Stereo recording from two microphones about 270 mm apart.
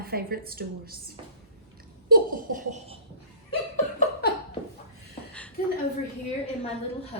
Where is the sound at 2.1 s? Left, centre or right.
Right.